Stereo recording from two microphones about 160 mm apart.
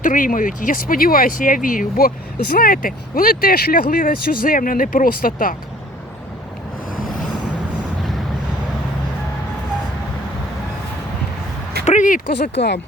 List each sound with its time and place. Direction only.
0.0 s speech: 55° left (ahead or behind)
11.9 s speech: 55° left (ahead or behind); by 12.8 s 90° left